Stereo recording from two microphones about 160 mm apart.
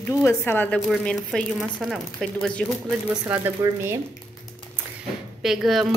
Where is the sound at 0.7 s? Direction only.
Centre (ahead or behind).